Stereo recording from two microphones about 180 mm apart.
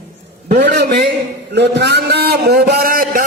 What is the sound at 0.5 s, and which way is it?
A man's voice, 60° right (ahead or behind).